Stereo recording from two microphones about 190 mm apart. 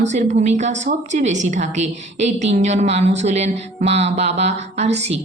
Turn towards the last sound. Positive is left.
turn(degrees=-35)  # may be behind; listen again after turning